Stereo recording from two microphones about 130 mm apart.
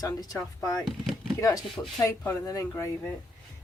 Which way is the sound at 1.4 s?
25° left (ahead or behind).